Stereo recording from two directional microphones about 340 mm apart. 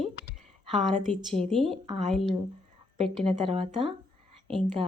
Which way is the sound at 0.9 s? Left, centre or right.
Right.